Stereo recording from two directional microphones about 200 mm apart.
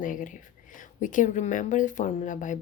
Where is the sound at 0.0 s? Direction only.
40° left (ahead or behind).